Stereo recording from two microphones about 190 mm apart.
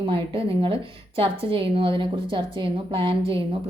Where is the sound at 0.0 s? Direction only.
30° right (ahead or behind).